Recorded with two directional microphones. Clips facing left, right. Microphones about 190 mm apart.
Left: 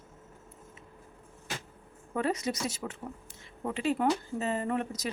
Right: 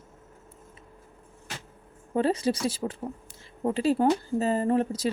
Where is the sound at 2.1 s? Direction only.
30° right (ahead or behind).